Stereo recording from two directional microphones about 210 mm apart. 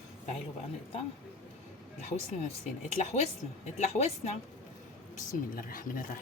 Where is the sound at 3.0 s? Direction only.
35° left (ahead or behind).